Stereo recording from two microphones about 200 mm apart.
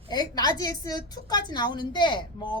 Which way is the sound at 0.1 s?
20° left (ahead or behind).